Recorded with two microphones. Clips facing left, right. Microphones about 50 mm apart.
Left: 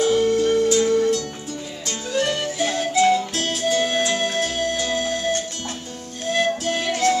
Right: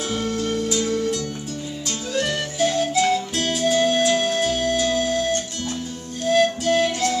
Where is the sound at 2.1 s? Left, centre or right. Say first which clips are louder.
Left 1 dB; centre.